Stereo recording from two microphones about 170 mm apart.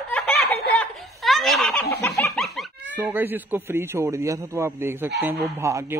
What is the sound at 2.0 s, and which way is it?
Snicker, 15° left (ahead or behind).